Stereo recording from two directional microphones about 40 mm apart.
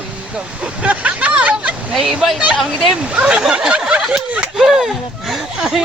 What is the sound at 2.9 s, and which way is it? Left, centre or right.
Speech, right.